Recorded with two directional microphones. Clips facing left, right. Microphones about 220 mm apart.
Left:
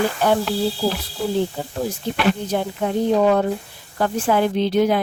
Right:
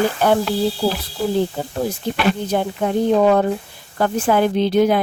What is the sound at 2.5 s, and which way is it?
Speech, 55° right (ahead or behind).